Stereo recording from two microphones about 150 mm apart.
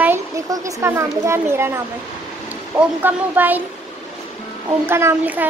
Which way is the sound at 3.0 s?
10° right (ahead or behind).